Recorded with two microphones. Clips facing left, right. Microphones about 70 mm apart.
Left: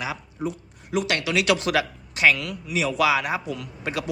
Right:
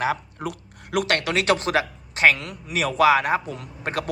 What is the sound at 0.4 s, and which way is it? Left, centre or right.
Speech, right.